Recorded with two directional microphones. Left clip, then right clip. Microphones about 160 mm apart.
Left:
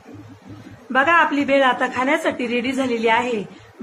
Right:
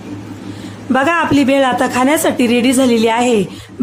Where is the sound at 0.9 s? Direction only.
90° right.